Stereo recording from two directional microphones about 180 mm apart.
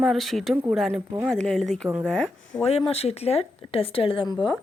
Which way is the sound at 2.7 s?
35° left (ahead or behind).